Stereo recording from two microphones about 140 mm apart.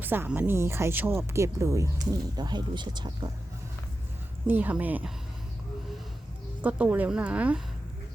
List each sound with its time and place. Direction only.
0.0 s speech: 15° right (ahead or behind); by 3.1 s 30° right (ahead or behind)
4.4 s speech: 15° right (ahead or behind)
6.6 s speech: 10° right (ahead or behind)